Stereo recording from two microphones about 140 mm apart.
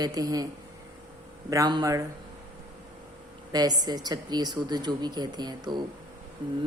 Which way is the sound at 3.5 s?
30° right (ahead or behind).